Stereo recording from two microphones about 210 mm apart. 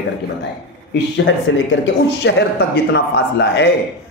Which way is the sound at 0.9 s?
60° left (ahead or behind).